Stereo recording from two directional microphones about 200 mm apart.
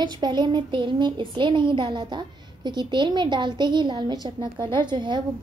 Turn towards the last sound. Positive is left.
turn(degrees=-20)  # may be behind; listen again after turning